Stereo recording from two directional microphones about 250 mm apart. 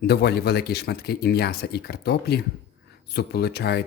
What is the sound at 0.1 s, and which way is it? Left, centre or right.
Speech, left.